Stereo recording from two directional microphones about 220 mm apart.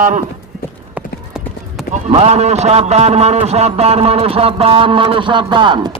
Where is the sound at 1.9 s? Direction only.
30° right (ahead or behind).